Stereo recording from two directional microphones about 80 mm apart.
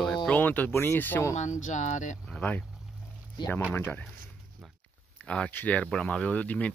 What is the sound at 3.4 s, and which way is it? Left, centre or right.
Speech, left.